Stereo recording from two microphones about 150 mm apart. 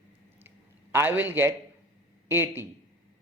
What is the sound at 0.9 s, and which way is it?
A man's voice, 10° right (ahead or behind).